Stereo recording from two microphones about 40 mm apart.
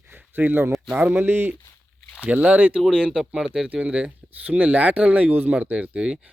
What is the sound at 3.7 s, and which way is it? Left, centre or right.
Speech, right.